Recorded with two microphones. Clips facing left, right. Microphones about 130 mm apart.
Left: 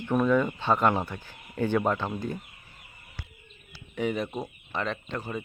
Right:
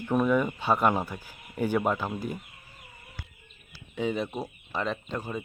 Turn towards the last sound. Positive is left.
turn(degrees=-10)  # may be behind; listen again after turning